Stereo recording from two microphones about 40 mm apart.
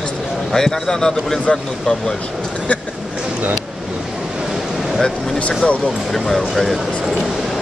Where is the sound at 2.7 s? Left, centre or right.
Left.